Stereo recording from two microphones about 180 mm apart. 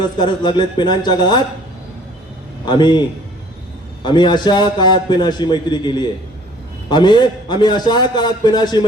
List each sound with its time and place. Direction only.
0.2 s a man's voice: 25° left (ahead or behind)
2.6 s a man's voice: 25° left (ahead or behind)
4.0 s a man's voice: 25° left (ahead or behind)